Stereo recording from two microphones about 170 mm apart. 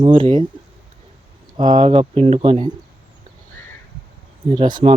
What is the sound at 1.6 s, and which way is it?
Speech, 25° right (ahead or behind).